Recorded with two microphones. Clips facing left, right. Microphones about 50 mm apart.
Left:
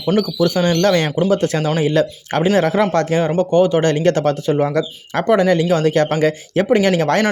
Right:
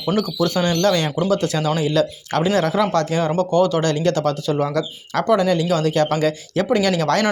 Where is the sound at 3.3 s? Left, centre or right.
Left.